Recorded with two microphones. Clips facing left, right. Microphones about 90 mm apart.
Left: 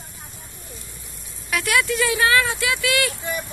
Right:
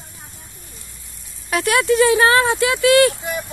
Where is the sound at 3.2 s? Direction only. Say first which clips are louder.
Right 2 dB; 20° right (ahead or behind).